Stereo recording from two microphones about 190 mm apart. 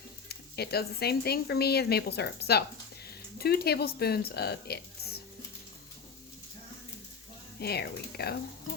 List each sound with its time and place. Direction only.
0.3 s speech: 55° left (ahead or behind)
7.6 s speech: 55° left (ahead or behind)